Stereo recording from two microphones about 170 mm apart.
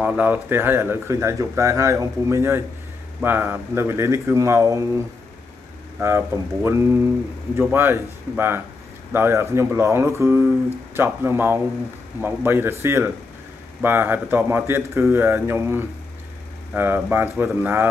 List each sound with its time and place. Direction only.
0.0 s speech: 10° right (ahead or behind)